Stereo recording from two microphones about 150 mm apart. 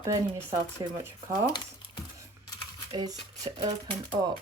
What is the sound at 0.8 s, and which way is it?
Speech, 30° right (ahead or behind).